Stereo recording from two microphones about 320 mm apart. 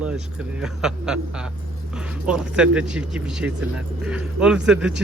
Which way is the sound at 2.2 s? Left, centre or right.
Centre.